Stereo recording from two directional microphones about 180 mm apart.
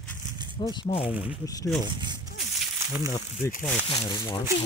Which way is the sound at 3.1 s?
20° left (ahead or behind).